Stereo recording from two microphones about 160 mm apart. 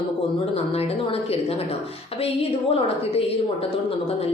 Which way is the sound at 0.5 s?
40° left (ahead or behind).